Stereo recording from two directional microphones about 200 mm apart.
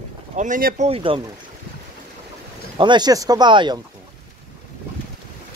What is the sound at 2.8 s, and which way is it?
Speech, 20° right (ahead or behind).